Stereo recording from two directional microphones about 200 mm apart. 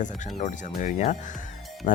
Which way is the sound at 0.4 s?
40° left (ahead or behind).